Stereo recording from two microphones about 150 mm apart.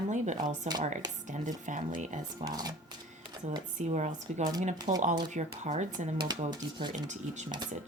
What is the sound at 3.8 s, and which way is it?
Speech, 50° right (ahead or behind).